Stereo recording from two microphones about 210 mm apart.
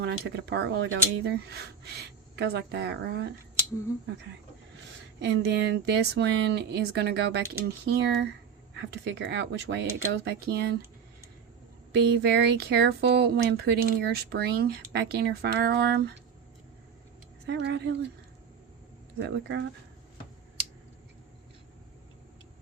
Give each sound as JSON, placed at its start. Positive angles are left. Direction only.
{"t": 0.0, "sound": "speech", "side_deg": -50}
{"t": 5.2, "sound": "speech", "side_deg": -55}
{"t": 11.9, "sound": "speech", "side_deg": -55}
{"t": 17.4, "sound": "speech", "side_deg": -55}
{"t": 19.2, "sound": "speech", "side_deg": -60}